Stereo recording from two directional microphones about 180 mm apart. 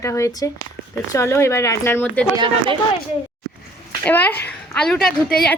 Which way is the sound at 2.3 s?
25° right (ahead or behind).